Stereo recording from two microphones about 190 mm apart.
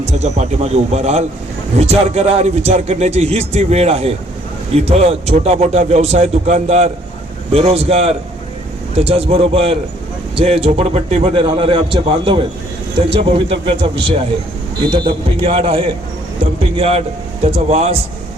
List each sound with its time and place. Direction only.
0.0 s a man's voice: 35° right (ahead or behind)